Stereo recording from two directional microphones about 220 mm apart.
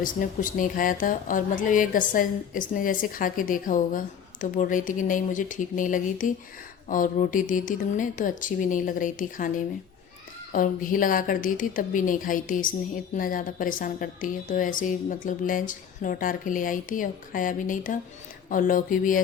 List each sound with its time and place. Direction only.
0.0 s a woman's voice: 40° left (ahead or behind)